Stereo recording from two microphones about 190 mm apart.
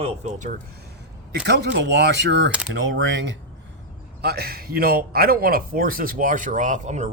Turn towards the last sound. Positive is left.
turn(degrees=-40)  # may be behind; listen again after turning